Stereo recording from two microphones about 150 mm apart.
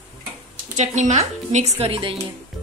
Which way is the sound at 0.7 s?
50° right (ahead or behind).